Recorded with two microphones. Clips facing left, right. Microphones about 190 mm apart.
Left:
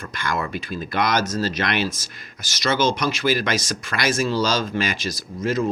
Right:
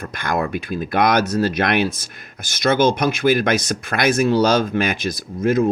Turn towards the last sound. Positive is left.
turn(degrees=-55)  # may be behind; listen again after turning